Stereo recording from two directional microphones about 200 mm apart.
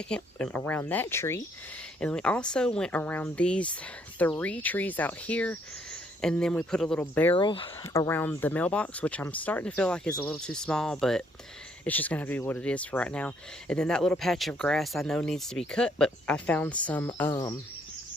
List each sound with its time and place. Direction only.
0.1 s speech: 5° left (ahead or behind)
7.3 s speech: 25° left (ahead or behind)
7.9 s speech: 10° left (ahead or behind)